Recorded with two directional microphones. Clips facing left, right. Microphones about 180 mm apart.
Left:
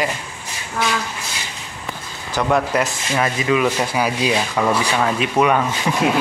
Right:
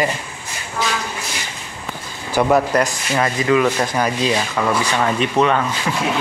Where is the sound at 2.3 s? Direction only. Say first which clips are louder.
Right 3 dB; 10° right (ahead or behind).